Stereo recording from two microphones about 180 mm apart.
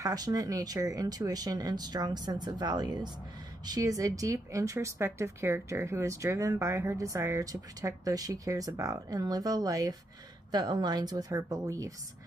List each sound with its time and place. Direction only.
0.0 s speech: 20° right (ahead or behind)